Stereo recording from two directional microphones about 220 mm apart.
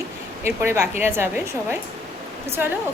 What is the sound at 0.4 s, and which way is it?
Speech, 10° right (ahead or behind).